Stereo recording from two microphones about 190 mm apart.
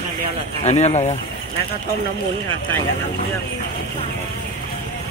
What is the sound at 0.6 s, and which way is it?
Speech, 35° left (ahead or behind).